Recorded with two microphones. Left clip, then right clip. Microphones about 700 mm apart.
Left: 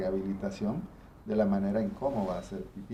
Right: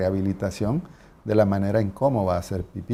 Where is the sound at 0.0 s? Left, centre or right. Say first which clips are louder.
Right 8 dB; right.